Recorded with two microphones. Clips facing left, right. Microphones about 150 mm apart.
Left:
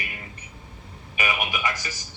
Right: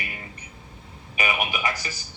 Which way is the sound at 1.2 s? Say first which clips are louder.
Right 1 dB; 20° right (ahead or behind).